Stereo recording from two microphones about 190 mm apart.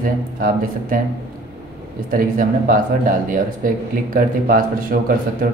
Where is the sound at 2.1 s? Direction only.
45° right (ahead or behind).